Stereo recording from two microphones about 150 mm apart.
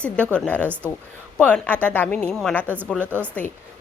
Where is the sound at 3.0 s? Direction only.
15° right (ahead or behind).